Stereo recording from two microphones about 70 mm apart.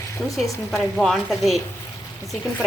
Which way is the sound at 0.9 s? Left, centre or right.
Centre.